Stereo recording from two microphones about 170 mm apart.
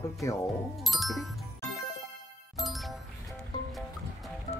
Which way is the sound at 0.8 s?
Centre (ahead or behind).